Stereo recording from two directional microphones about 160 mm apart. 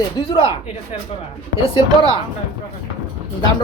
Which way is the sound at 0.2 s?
30° left (ahead or behind).